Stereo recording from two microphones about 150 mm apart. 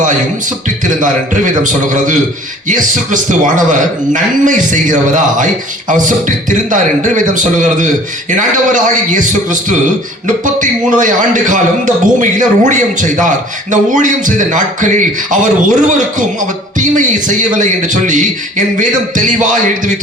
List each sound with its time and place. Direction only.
1.0 s a man's voice: 60° right (ahead or behind)